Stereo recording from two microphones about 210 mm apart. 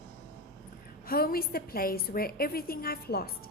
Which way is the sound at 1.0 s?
45° left (ahead or behind).